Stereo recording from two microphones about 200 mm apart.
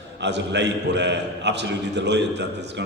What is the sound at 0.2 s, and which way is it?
A man's voice, 60° right (ahead or behind).